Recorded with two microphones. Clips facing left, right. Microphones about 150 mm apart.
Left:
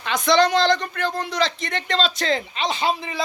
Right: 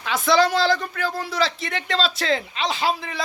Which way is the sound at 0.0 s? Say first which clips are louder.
Left 1 dB; 5° right (ahead or behind).